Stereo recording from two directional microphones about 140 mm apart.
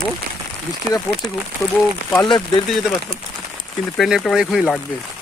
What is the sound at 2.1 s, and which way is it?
Speech, 35° left (ahead or behind).